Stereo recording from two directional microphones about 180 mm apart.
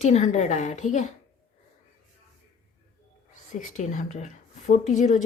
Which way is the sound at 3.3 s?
45° left (ahead or behind).